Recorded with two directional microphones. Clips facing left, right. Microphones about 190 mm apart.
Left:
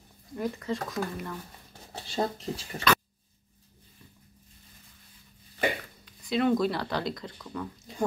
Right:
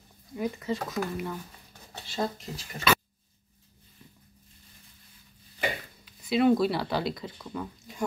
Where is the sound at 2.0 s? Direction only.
30° left (ahead or behind).